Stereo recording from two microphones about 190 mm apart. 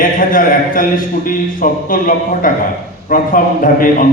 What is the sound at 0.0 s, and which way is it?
A man's voice, 45° left (ahead or behind).